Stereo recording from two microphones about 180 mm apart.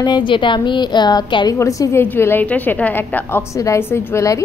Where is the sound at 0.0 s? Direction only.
25° left (ahead or behind).